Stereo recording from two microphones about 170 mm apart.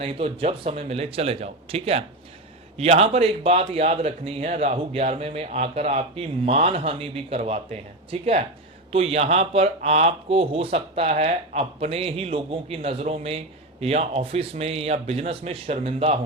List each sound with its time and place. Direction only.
0.0 s speech: 35° right (ahead or behind)